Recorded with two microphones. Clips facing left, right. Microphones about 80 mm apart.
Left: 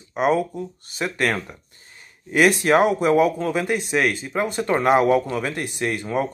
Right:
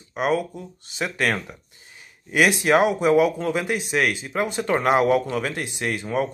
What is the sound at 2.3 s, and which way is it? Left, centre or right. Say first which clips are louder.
A man's voice: left 2 dB; centre.